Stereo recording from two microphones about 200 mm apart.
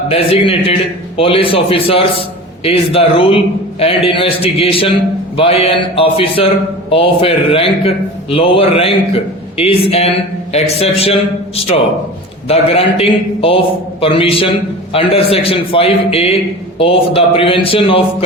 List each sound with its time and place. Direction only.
0.1 s a man's voice: 30° left (ahead or behind)